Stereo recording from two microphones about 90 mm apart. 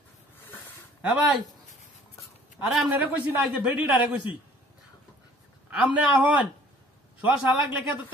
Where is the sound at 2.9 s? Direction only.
20° right (ahead or behind).